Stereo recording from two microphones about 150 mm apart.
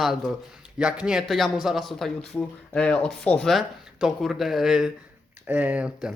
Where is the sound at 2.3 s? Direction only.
15° left (ahead or behind).